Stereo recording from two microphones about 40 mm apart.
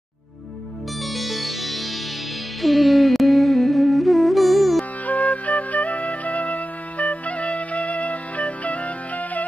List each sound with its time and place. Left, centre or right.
1.0 s music: centre
5.0 s music: left